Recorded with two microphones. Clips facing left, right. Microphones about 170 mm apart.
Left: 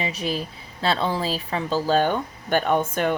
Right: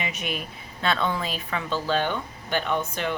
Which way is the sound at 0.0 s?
35° left (ahead or behind).